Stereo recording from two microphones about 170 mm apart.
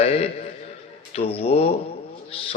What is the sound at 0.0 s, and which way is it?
A man's voice, 35° left (ahead or behind).